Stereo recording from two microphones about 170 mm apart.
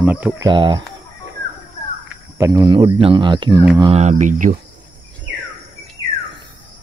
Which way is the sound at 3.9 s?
45° right (ahead or behind).